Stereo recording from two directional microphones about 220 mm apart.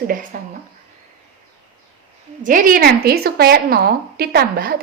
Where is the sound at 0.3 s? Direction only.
35° right (ahead or behind).